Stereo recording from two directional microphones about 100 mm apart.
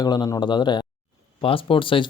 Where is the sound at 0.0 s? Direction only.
40° left (ahead or behind).